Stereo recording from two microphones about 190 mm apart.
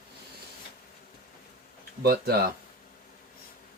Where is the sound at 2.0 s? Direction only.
55° right (ahead or behind).